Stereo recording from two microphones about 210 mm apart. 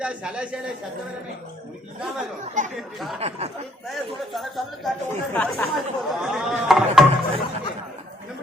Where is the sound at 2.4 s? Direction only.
35° right (ahead or behind).